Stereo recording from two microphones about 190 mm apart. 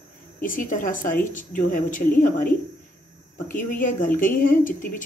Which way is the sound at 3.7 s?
45° left (ahead or behind).